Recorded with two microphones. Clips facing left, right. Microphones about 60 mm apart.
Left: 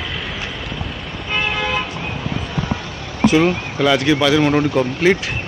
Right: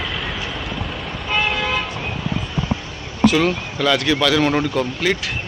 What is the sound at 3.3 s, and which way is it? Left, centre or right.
Speech, centre.